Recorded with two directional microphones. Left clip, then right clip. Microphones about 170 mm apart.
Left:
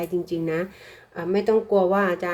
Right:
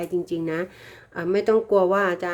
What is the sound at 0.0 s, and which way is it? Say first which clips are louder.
Speech: even; 20° right (ahead or behind).